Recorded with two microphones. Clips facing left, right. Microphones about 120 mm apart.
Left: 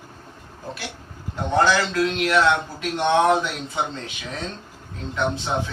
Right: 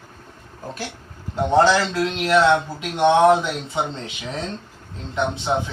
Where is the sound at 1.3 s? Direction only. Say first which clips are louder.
Right 3 dB; 30° right (ahead or behind).